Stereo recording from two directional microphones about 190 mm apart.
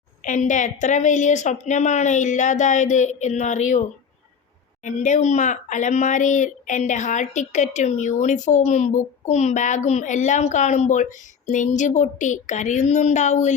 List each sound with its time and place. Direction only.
0.2 s speech: 40° left (ahead or behind)